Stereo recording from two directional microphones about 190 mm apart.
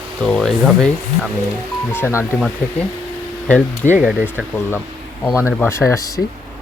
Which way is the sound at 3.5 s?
5° left (ahead or behind).